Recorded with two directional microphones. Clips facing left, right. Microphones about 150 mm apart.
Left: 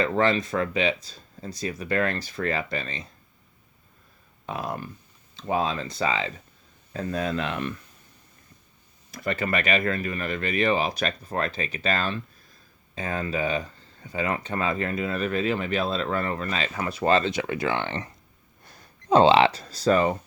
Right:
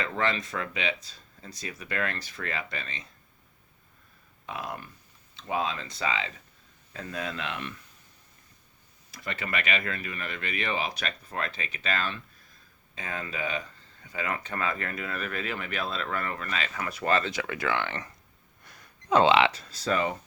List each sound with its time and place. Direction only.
0.0 s speech: 35° left (ahead or behind)
4.4 s speech: 35° left (ahead or behind)
9.1 s speech: 45° left (ahead or behind)